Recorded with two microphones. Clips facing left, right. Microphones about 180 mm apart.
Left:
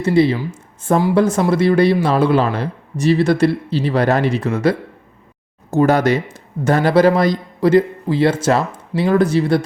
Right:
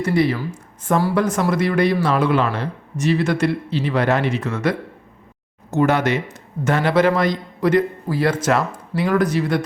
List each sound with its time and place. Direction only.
0.0 s a man's voice: 25° left (ahead or behind)